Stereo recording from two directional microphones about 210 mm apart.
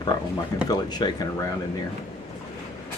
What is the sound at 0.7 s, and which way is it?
Speech, 20° left (ahead or behind).